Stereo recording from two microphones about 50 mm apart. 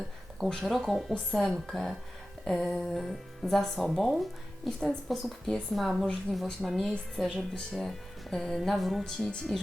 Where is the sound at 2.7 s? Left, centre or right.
Centre.